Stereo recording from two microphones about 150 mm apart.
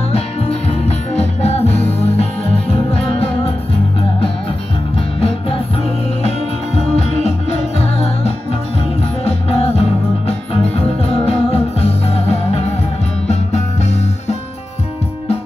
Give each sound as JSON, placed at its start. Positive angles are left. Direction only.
{"t": 0.1, "sound": "music", "side_deg": 45}
{"t": 7.0, "sound": "music", "side_deg": 45}